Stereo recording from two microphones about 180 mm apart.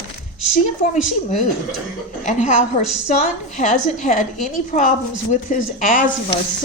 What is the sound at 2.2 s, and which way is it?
A woman's voice, 45° left (ahead or behind).